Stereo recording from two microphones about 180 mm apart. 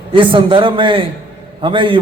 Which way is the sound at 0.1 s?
30° right (ahead or behind).